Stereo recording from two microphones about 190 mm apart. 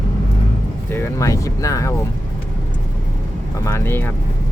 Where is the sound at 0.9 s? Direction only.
15° left (ahead or behind).